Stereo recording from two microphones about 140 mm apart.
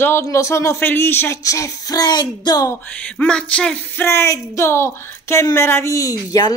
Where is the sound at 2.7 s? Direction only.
10° left (ahead or behind).